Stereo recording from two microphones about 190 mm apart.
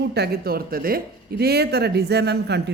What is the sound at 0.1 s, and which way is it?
A man's voice, 55° right (ahead or behind).